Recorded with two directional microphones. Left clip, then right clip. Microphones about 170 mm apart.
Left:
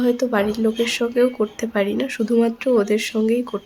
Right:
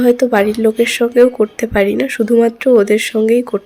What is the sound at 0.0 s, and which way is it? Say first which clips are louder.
Speech: right 8 dB; 25° right (ahead or behind).